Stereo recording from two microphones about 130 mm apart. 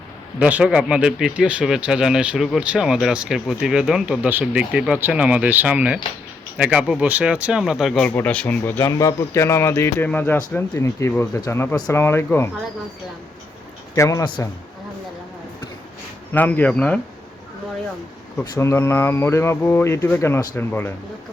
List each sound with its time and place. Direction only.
0.3 s speech: 10° right (ahead or behind)
8.1 s speech: 10° left (ahead or behind)
13.9 s speech: 25° left (ahead or behind)
16.3 s speech: 15° left (ahead or behind)
18.6 s speech: 20° left (ahead or behind)